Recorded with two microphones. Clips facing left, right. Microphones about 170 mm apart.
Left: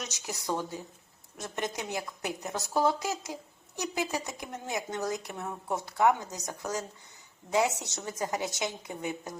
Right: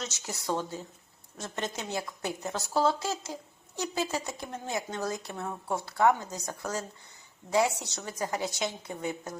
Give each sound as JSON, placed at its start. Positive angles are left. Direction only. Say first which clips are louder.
{"t": 0.0, "sound": "a woman's voice", "louder": "right 1 dB", "side_deg": 15}